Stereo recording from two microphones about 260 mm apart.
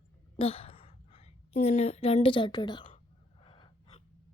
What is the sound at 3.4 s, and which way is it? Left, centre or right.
Gasp, centre.